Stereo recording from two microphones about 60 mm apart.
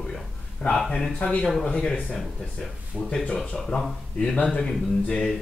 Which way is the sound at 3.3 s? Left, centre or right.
Centre.